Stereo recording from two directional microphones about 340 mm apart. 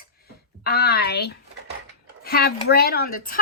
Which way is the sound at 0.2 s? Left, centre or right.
Left.